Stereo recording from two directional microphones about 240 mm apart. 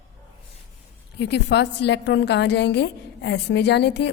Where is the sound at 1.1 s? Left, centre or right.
Left.